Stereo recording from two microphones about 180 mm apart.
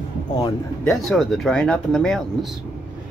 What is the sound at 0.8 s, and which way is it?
Speech, centre (ahead or behind).